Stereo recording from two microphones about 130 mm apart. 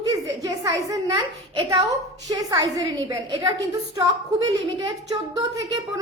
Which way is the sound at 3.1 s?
40° right (ahead or behind).